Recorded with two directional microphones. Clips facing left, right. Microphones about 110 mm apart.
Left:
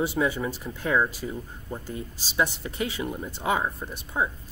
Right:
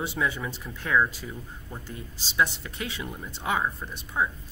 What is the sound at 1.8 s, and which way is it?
Speech, 40° left (ahead or behind).